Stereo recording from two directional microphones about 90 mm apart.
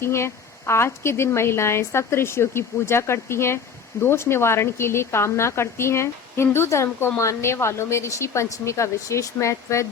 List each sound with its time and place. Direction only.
0.0 s a woman's voice: 30° left (ahead or behind)